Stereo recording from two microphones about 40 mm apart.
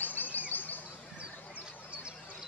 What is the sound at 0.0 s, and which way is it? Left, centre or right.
Chirp, left.